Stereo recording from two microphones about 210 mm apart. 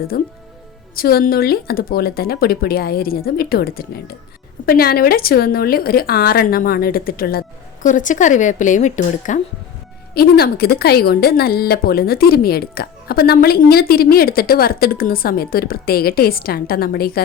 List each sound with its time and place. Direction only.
0.1 s speech: 45° left (ahead or behind)
10.2 s speech: 50° left (ahead or behind)